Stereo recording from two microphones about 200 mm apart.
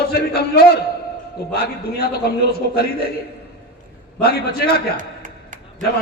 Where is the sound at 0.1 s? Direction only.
50° left (ahead or behind).